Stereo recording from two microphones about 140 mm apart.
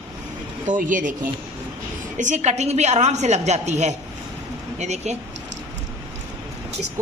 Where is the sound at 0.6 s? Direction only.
70° right (ahead or behind); by 5.1 s 55° right (ahead or behind).